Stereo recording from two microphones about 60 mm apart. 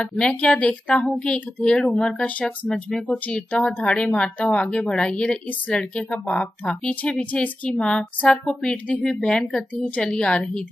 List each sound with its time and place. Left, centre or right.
0.0 s speech: centre
3.3 s speech: left